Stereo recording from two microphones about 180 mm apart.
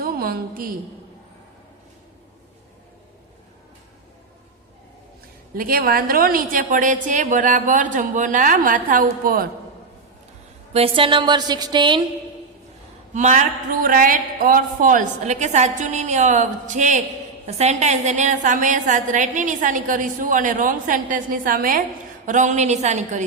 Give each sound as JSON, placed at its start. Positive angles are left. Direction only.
{"t": 0.0, "sound": "a woman's voice", "side_deg": -55}
{"t": 5.5, "sound": "a woman's voice", "side_deg": -55}
{"t": 10.7, "sound": "a woman's voice", "side_deg": -35}
{"t": 13.1, "sound": "a woman's voice", "side_deg": -40}